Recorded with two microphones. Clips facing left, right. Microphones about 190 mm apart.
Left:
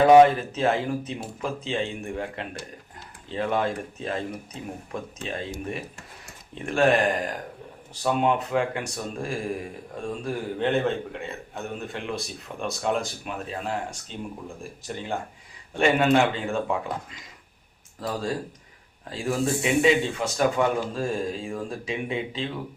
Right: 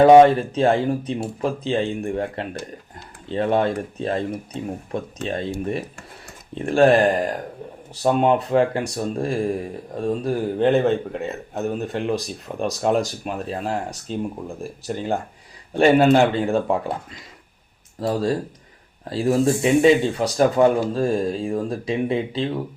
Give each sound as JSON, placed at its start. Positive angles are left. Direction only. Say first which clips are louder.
{"t": 0.1, "sound": "speech", "louder": "right 4 dB", "side_deg": -30}
{"t": 6.5, "sound": "speech", "louder": "right 6 dB", "side_deg": -35}
{"t": 18.0, "sound": "speech", "louder": "right 7 dB", "side_deg": -35}